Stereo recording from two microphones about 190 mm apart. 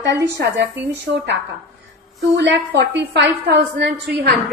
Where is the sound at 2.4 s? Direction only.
65° right (ahead or behind).